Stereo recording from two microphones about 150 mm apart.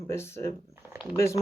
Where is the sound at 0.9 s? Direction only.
10° right (ahead or behind).